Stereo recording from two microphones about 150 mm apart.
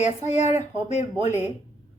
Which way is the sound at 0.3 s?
50° left (ahead or behind).